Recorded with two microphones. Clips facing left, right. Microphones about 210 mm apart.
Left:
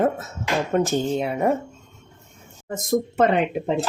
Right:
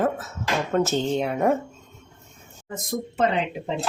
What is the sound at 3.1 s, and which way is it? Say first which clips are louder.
Speech: left 2 dB; 55° left (ahead or behind).